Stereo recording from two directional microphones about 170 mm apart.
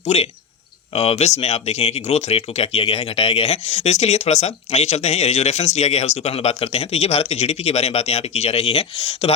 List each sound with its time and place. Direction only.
0.0 s speech: 40° left (ahead or behind)